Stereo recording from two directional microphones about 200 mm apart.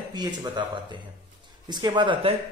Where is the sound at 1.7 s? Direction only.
20° right (ahead or behind).